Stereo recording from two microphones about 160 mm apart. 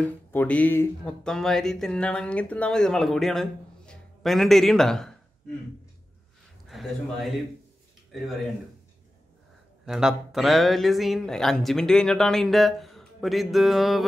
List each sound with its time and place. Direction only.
0.0 s speech: 10° left (ahead or behind)
6.7 s speech: centre (ahead or behind)
9.8 s speech: 5° right (ahead or behind)